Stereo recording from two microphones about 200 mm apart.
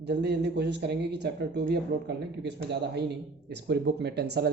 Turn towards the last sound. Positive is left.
turn(degrees=-55)  # may be behind; listen again after turning